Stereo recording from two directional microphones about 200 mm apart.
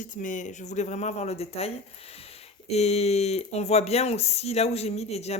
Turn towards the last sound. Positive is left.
turn(degrees=30)  # may be behind; listen again after turning